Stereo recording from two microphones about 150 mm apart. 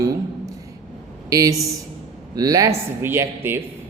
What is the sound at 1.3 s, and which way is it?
A man's voice, 20° right (ahead or behind).